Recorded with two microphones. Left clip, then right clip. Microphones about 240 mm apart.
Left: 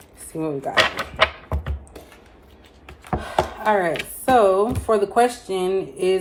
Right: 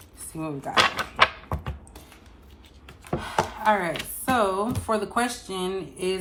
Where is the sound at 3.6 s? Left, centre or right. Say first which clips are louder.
Left 3 dB; centre.